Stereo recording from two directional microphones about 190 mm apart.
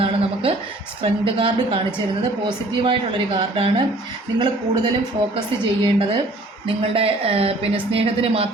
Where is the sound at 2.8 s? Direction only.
25° right (ahead or behind).